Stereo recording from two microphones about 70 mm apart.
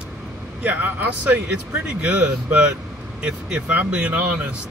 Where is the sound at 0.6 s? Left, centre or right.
Right.